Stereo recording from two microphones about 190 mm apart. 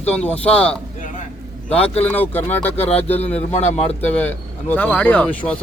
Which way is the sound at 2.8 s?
30° left (ahead or behind).